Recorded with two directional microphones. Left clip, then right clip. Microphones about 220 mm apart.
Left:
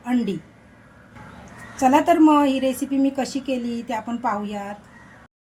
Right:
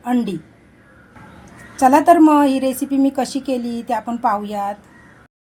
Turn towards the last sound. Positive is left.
turn(degrees=-30)  # may be behind; listen again after turning